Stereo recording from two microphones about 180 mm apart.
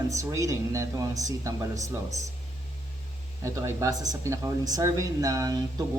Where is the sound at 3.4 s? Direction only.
15° right (ahead or behind).